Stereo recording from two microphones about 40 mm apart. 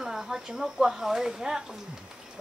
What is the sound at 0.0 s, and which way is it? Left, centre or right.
Speech, centre.